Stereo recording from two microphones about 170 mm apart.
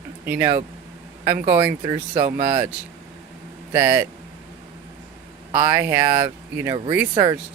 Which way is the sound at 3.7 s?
10° right (ahead or behind).